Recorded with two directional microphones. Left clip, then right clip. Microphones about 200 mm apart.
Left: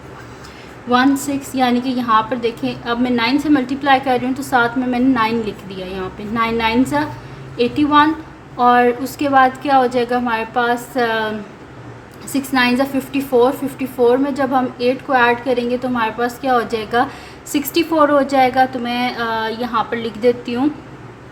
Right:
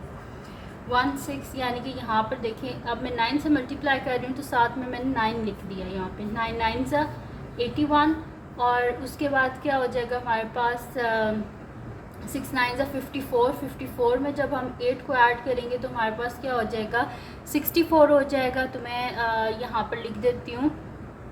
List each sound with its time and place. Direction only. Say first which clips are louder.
1.5 s a woman's voice: left 13 dB; 35° left (ahead or behind)
12.3 s a woman's voice: left 10 dB; 30° left (ahead or behind)